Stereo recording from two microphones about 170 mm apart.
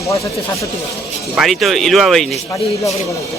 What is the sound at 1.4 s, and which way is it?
Speech, centre (ahead or behind).